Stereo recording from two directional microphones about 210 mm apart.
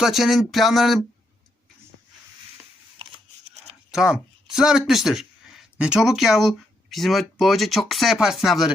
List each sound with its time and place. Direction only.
0.0 s speech: centre (ahead or behind)
3.0 s a sound: 30° right (ahead or behind)
3.9 s speech: 5° right (ahead or behind)